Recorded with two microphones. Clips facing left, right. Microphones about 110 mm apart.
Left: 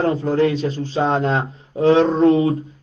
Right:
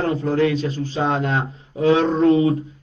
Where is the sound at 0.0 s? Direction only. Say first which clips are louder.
Left 2 dB; 30° left (ahead or behind).